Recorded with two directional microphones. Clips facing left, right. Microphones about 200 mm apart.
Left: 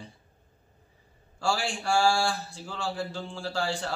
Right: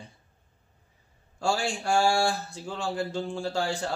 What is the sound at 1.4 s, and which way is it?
Speech, 20° right (ahead or behind).